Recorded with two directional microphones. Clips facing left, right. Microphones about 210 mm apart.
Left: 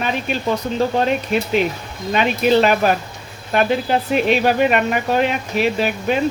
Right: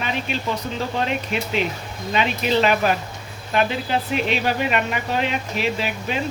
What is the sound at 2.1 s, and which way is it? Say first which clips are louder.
Speech: left 5 dB; 50° left (ahead or behind).